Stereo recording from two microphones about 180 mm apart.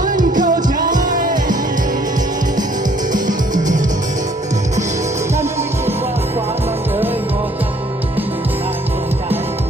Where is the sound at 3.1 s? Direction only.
45° right (ahead or behind).